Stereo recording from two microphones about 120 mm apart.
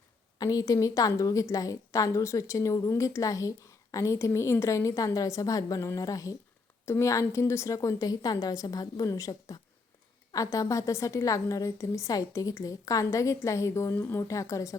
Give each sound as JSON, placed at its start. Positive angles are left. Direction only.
{"t": 0.3, "sound": "a woman's voice", "side_deg": 30}